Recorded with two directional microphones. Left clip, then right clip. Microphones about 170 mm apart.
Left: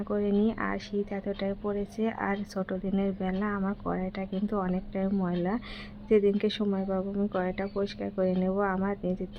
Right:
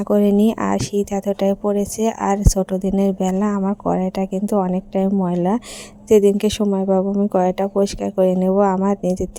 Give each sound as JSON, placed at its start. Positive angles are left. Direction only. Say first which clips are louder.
{"t": 0.1, "sound": "speech", "louder": "right 12 dB", "side_deg": -45}
{"t": 6.7, "sound": "speech", "louder": "right 13 dB", "side_deg": -35}